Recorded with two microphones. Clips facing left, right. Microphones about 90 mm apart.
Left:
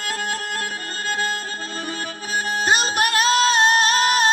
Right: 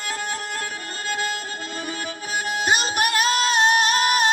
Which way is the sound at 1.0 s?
40° left (ahead or behind).